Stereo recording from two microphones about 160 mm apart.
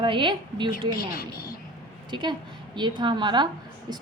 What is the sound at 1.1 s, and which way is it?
Speech, 65° left (ahead or behind).